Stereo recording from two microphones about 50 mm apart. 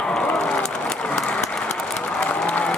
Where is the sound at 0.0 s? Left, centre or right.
Centre.